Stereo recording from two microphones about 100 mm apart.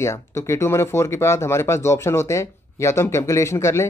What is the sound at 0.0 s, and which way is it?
Speech, 25° left (ahead or behind).